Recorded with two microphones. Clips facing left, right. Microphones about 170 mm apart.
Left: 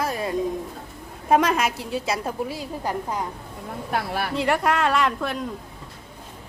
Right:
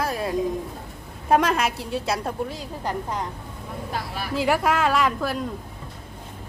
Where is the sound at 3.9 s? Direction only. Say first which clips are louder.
Left 6 dB; 65° left (ahead or behind).